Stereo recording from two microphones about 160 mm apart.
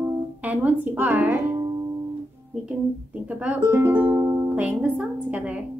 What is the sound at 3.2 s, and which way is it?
Speech, 10° right (ahead or behind).